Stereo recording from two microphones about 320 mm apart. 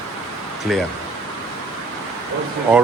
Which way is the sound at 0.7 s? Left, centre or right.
Centre.